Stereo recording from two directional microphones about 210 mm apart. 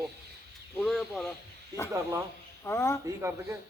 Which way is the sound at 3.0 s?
15° right (ahead or behind).